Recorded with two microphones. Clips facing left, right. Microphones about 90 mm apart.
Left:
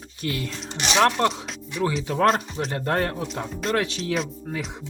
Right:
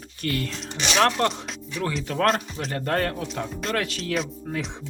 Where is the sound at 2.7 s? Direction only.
20° left (ahead or behind).